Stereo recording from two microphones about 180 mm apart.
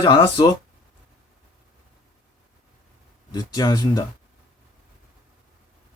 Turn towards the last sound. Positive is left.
turn(degrees=20)  # may be behind; listen again after turning